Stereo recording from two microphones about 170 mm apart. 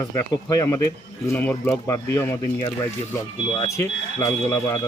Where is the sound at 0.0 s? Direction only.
20° left (ahead or behind).